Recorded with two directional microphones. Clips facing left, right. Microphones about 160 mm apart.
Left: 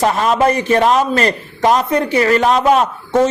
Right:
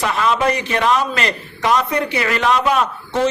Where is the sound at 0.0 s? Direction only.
40° left (ahead or behind).